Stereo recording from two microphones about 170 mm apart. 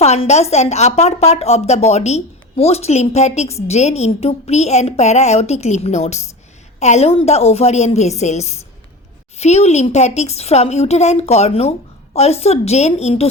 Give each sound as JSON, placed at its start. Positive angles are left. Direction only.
{"t": 0.0, "sound": "a woman's voice", "side_deg": 40}